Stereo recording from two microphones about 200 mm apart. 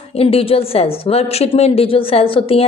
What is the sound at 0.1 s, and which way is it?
A woman's voice, 30° left (ahead or behind).